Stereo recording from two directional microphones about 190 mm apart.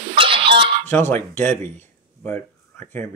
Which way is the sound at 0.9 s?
10° left (ahead or behind).